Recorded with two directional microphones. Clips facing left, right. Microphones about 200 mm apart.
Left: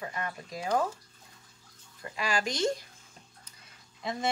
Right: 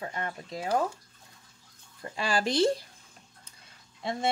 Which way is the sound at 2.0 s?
30° right (ahead or behind).